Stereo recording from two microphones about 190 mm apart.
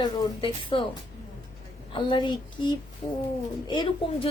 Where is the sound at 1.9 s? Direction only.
25° left (ahead or behind).